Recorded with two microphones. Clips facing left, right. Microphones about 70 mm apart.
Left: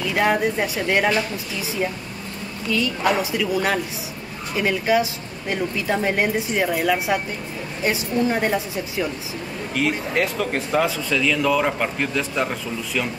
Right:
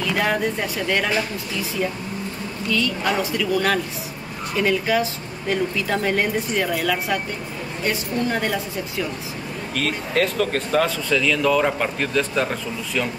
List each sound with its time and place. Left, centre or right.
0.2 s speech: centre
2.7 s speech: centre